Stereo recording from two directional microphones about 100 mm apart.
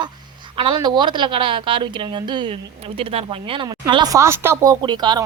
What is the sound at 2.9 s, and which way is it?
Speech, 70° right (ahead or behind).